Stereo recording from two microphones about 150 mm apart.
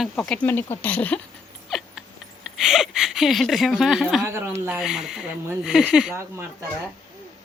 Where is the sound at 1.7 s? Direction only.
Centre (ahead or behind).